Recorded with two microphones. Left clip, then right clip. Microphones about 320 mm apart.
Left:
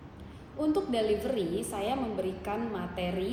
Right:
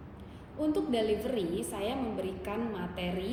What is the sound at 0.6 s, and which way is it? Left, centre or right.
A woman's voice, centre.